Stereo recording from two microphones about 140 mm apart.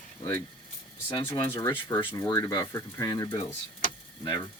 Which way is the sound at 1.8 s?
35° left (ahead or behind).